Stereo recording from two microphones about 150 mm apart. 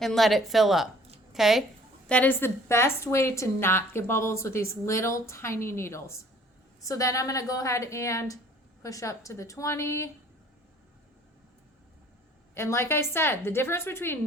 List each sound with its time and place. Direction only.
0.0 s a woman's voice: centre (ahead or behind)
2.0 s a woman's voice: 10° left (ahead or behind)
12.5 s a woman's voice: 15° left (ahead or behind)